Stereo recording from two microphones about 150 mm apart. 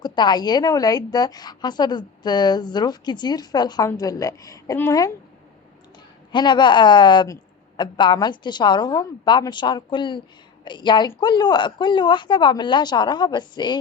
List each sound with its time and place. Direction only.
0.0 s a woman's voice: 30° left (ahead or behind)
6.3 s a woman's voice: 30° left (ahead or behind)